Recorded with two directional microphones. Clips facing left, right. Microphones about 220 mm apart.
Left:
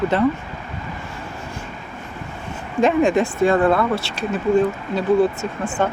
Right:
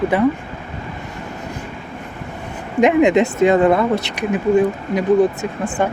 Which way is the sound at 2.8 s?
20° right (ahead or behind).